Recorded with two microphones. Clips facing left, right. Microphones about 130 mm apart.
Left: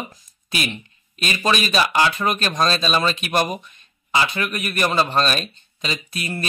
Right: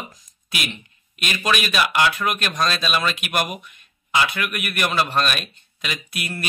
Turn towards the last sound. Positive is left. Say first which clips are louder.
# left 2 dB
turn(degrees=30)  # may be behind; listen again after turning